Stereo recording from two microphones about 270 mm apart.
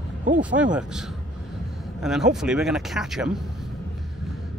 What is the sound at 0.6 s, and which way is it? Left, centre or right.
Speech, centre.